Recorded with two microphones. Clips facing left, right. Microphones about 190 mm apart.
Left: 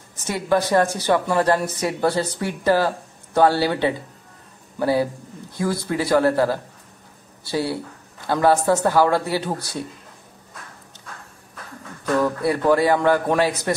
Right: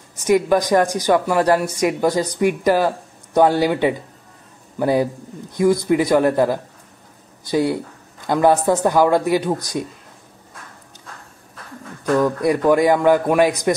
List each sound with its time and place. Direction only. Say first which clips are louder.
0.1 s a woman's voice: right 5 dB; 15° right (ahead or behind)
12.4 s a woman's voice: right 3 dB; 15° right (ahead or behind)